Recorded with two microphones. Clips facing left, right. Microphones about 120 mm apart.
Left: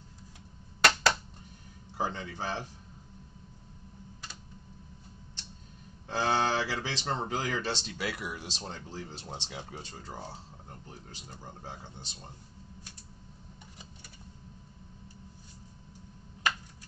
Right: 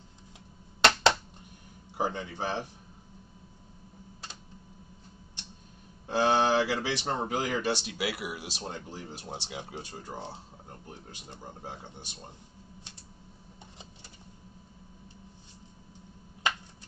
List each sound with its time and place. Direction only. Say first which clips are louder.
0.7 s a sound: right 3 dB; 25° right (ahead or behind)
2.0 s speech: right 2 dB; 15° right (ahead or behind)
6.0 s speech: right 4 dB; 15° right (ahead or behind)